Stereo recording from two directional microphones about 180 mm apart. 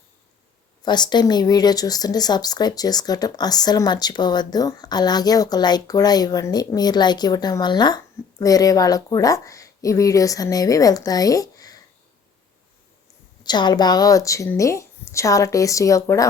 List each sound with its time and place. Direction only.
0.8 s speech: 25° left (ahead or behind)
13.4 s speech: 25° left (ahead or behind)